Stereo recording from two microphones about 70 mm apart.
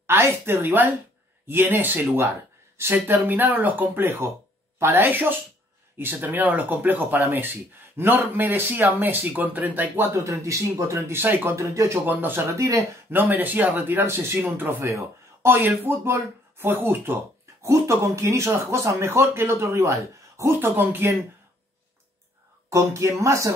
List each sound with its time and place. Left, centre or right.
0.0 s speech: right
10.1 s speech: right
11.7 s speech: right
12.1 s speech: right
12.4 s speech: right
13.1 s speech: right
14.8 s speech: right
17.6 s speech: right
22.7 s speech: right